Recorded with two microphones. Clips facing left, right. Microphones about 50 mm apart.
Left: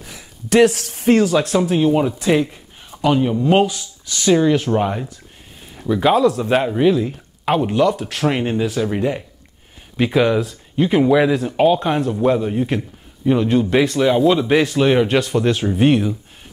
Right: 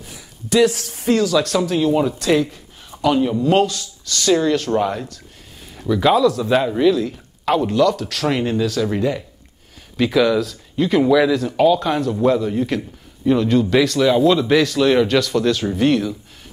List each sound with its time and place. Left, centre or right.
0.0 s a sound: left
1.4 s speech: left
2.4 s a sound: left
3.0 s speech: centre
6.1 s speech: left
9.9 s speech: left